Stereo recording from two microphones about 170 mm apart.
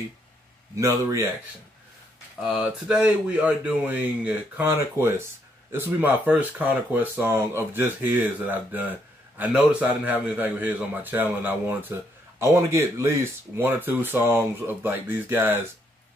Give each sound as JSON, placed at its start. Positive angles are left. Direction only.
{"t": 0.7, "sound": "speech", "side_deg": -15}
{"t": 2.4, "sound": "speech", "side_deg": -5}